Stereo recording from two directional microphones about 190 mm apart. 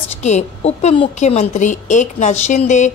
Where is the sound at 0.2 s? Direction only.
35° left (ahead or behind).